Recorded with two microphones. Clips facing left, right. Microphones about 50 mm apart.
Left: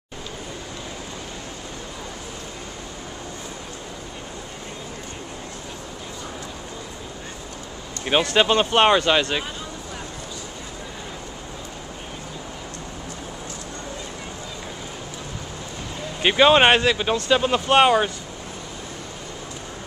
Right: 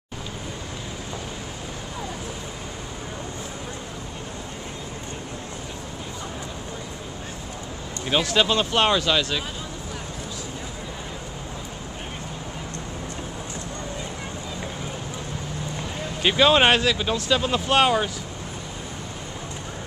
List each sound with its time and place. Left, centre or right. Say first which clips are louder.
8.0 s speech: left 3 dB; left
16.2 s speech: left 3 dB; centre